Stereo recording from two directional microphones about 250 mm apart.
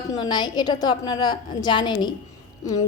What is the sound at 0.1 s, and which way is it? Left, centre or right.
A woman's voice, centre.